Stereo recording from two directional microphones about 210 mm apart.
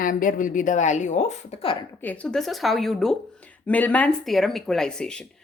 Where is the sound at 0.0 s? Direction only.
40° left (ahead or behind).